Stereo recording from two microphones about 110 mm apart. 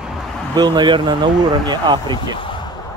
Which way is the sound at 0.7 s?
45° right (ahead or behind).